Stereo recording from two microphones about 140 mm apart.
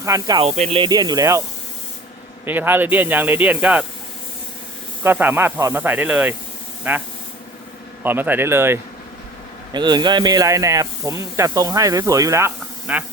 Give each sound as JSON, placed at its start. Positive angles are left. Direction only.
{"t": 0.0, "sound": "speech", "side_deg": -25}
{"t": 0.5, "sound": "speech", "side_deg": -50}
{"t": 0.8, "sound": "speech", "side_deg": -30}
{"t": 2.4, "sound": "speech", "side_deg": -15}
{"t": 5.0, "sound": "speech", "side_deg": -15}
{"t": 8.0, "sound": "speech", "side_deg": -15}
{"t": 9.7, "sound": "speech", "side_deg": -30}
{"t": 12.9, "sound": "speech", "side_deg": -10}